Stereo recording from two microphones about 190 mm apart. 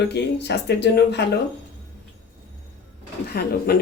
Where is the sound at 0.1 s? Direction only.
60° left (ahead or behind).